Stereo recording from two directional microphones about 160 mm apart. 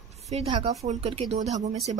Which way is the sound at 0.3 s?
40° right (ahead or behind).